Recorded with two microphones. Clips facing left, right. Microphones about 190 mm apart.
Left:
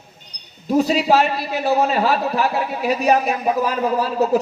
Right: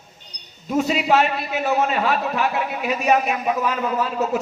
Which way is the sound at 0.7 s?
35° left (ahead or behind).